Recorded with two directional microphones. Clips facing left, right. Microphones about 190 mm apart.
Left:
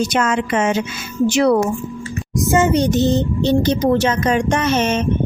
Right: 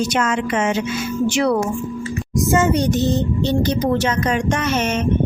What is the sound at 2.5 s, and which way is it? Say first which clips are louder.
Speech: left 2 dB; 20° left (ahead or behind).